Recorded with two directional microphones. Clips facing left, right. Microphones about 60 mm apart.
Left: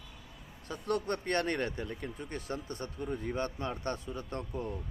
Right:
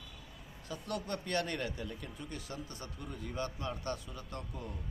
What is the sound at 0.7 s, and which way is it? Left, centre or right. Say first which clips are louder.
Speech: left 6 dB; left.